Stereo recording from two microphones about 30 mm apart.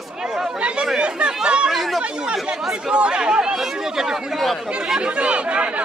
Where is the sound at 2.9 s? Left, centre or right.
Right.